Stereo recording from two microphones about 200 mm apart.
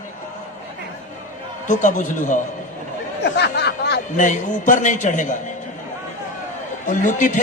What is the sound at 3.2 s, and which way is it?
Snicker, 55° left (ahead or behind).